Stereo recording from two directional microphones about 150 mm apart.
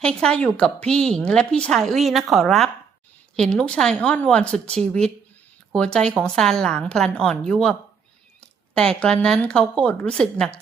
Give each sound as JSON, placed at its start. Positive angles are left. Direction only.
{"t": 0.0, "sound": "a woman's voice", "side_deg": 5}